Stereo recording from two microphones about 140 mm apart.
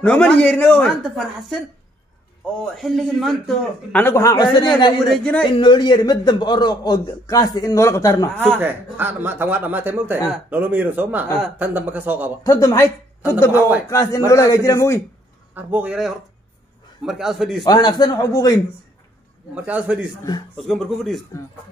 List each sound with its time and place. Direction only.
0.0 s speech: 5° left (ahead or behind)
2.6 s a man's voice: centre (ahead or behind)
4.0 s a man's voice: 20° left (ahead or behind)
5.1 s speech: 10° left (ahead or behind)
5.4 s a man's voice: 35° left (ahead or behind)
8.5 s a man's voice: 15° right (ahead or behind)
12.4 s a man's voice: 20° left (ahead or behind)
13.5 s a man's voice: 10° right (ahead or behind)
13.8 s a man's voice: 25° left (ahead or behind)
15.5 s a man's voice: 10° right (ahead or behind)
17.6 s a man's voice: 30° left (ahead or behind)
19.5 s a man's voice: 10° right (ahead or behind)
20.5 s a man's voice: 5° left (ahead or behind)